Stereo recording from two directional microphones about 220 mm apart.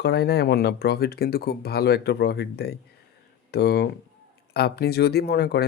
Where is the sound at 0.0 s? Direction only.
50° left (ahead or behind).